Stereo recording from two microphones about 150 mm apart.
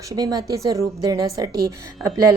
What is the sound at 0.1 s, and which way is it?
A woman's voice, 25° right (ahead or behind).